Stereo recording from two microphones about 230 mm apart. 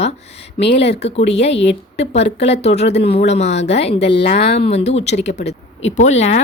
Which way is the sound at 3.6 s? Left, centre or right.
Left.